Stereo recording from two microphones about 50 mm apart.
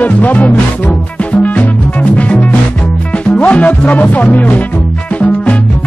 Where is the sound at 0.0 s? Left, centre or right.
Left.